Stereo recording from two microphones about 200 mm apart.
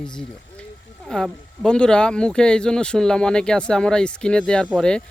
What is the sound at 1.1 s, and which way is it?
Speech, 5° left (ahead or behind).